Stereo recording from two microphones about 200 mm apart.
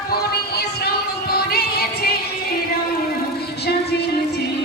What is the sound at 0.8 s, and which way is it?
Music, 50° left (ahead or behind).